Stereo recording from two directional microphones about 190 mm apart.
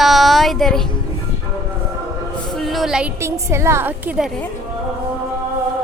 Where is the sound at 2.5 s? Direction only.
Centre (ahead or behind).